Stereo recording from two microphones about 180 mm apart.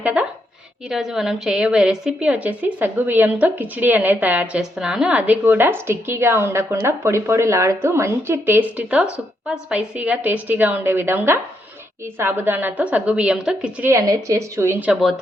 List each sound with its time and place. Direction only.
0.0 s a woman's voice: 5° right (ahead or behind)
13.9 s a woman's voice: 15° right (ahead or behind)